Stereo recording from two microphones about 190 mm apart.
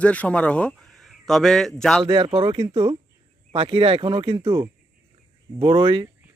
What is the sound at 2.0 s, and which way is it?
Speech, 25° right (ahead or behind).